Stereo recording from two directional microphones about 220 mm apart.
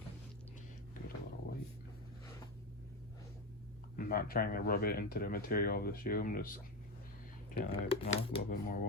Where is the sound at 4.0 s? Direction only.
40° left (ahead or behind).